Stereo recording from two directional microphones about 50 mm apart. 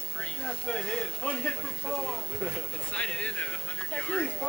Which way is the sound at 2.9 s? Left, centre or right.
Left.